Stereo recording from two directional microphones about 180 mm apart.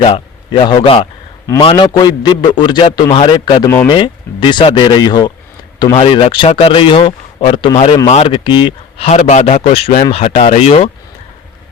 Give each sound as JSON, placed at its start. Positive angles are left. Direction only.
{"t": 0.0, "sound": "a man's voice", "side_deg": 30}
{"t": 3.7, "sound": "speech", "side_deg": 10}
{"t": 3.9, "sound": "speech", "side_deg": 25}